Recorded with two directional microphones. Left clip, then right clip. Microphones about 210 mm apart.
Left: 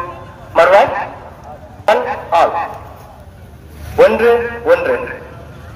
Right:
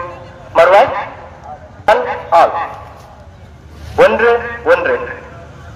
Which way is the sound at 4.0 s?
30° right (ahead or behind).